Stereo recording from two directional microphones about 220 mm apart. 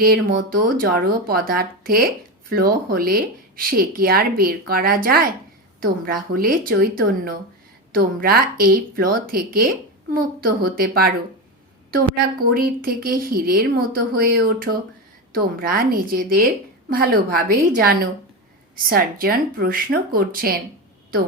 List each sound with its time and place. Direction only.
0.0 s a woman's voice: 40° right (ahead or behind)